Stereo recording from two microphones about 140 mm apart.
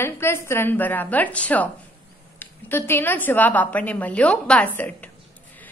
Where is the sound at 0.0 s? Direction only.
15° left (ahead or behind).